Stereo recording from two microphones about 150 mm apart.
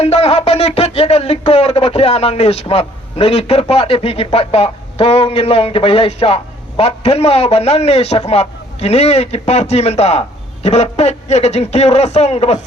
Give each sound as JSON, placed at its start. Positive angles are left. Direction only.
{"t": 0.0, "sound": "speech", "side_deg": 40}